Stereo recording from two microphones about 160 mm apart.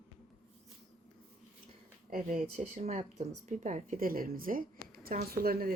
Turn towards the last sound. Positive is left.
turn(degrees=-65)  # may be behind; listen again after turning